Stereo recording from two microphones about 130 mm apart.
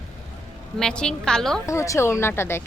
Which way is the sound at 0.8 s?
5° left (ahead or behind).